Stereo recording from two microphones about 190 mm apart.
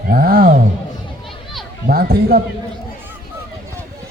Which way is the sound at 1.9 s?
55° right (ahead or behind).